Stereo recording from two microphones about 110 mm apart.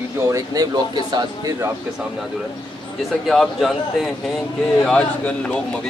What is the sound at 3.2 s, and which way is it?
Speech, 5° left (ahead or behind).